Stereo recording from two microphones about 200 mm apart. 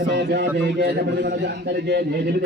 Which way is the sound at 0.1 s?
60° right (ahead or behind).